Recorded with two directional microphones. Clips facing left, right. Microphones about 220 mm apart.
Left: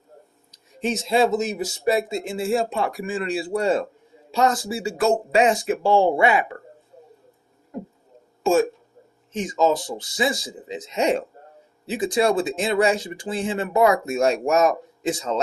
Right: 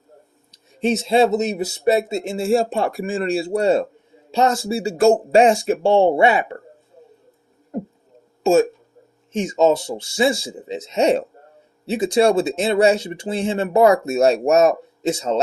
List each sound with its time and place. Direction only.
0.8 s speech: 25° right (ahead or behind)
9.3 s speech: 25° right (ahead or behind)
14.7 s speech: 25° right (ahead or behind)